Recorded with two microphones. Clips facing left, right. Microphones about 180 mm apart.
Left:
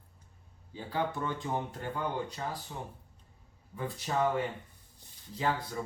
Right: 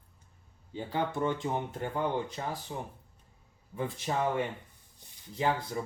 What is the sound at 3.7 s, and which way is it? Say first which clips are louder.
Speech: even; 25° right (ahead or behind).